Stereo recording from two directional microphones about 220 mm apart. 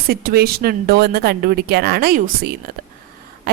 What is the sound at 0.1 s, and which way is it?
A woman's voice, 45° right (ahead or behind).